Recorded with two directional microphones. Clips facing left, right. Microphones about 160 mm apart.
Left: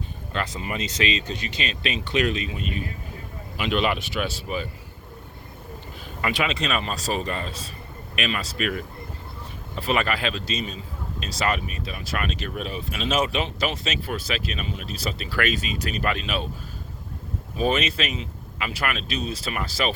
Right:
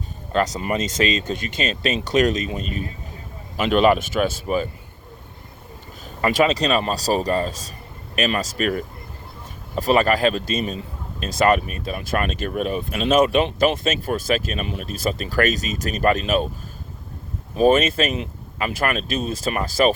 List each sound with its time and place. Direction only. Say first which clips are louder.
0.3 s a man's voice: right 8 dB; 40° right (ahead or behind)
6.2 s a man's voice: right 7 dB; 40° right (ahead or behind)
17.6 s a man's voice: right 8 dB; 45° right (ahead or behind)